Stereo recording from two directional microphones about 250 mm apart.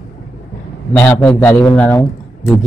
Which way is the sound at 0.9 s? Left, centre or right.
Centre.